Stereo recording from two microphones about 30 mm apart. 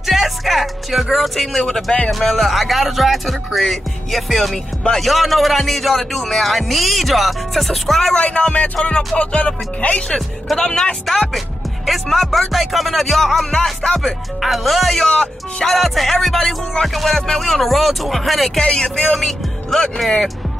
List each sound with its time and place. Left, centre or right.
0.0 s music: centre
1.3 s speech: centre
1.9 s speech: left
2.3 s speech: centre
8.1 s music: left
9.8 s speech: left
10.1 s speech: centre
18.6 s speech: left
19.1 s speech: centre